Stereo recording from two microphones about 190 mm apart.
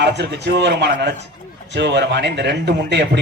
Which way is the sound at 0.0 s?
65° right (ahead or behind).